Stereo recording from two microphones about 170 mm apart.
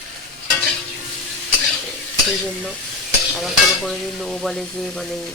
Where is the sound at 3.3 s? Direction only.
Centre (ahead or behind).